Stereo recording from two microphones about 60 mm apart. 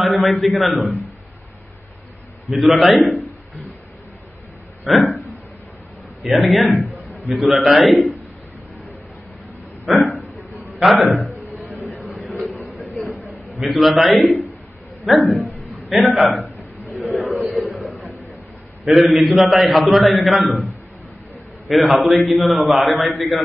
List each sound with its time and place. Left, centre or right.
0.0 s a man's voice: centre
2.6 s a man's voice: centre
4.8 s a man's voice: centre
6.2 s a man's voice: centre
9.8 s a man's voice: centre
11.8 s a sound: right
12.3 s a sound: centre
13.6 s a man's voice: centre
17.1 s a sound: centre
18.9 s a man's voice: centre